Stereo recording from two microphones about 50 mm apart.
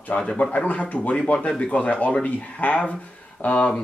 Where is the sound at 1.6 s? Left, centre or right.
Left.